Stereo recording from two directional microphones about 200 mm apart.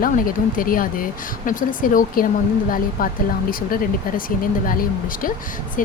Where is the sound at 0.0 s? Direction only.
45° left (ahead or behind).